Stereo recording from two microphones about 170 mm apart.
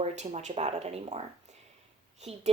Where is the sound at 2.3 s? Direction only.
35° right (ahead or behind).